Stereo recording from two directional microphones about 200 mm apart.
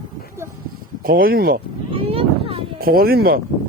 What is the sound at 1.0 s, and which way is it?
Speech, 45° right (ahead or behind).